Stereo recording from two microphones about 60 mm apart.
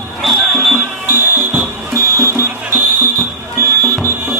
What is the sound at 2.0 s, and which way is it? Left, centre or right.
Music, right.